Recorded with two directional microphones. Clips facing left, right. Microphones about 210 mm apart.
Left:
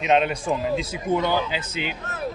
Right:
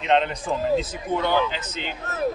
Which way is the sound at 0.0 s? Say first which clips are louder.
Left 1 dB; 10° left (ahead or behind).